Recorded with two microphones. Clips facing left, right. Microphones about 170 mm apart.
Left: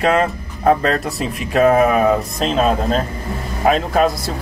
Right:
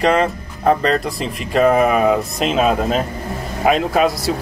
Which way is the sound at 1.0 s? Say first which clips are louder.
Left 1 dB; centre (ahead or behind).